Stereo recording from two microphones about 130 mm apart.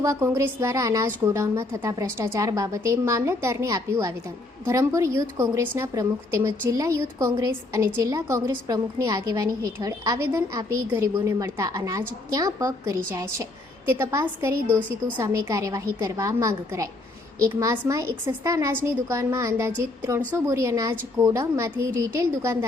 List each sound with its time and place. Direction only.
0.0 s a woman's voice: 25° right (ahead or behind)